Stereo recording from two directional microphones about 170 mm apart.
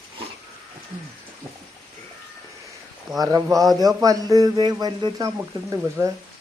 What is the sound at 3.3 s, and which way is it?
Speech, 15° right (ahead or behind).